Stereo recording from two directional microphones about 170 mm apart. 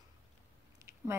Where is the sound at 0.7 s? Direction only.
15° right (ahead or behind).